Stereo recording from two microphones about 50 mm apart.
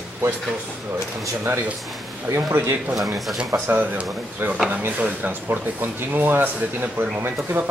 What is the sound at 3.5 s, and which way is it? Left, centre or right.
Speech, right.